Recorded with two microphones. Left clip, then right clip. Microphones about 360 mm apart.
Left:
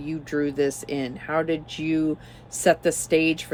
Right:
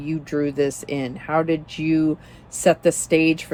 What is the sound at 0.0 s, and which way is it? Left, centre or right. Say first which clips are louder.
Speech: right 3 dB; centre.